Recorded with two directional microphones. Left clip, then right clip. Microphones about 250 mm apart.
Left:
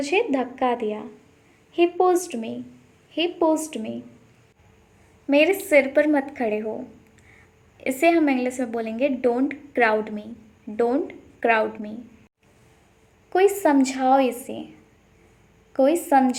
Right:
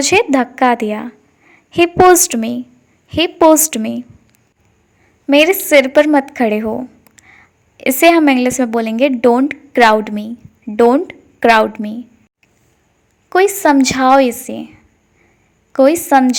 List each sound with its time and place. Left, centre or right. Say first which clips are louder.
0.0 s a woman's voice: right 10 dB; right
5.2 s a woman's voice: right 8 dB; right
13.3 s a woman's voice: right 7 dB; right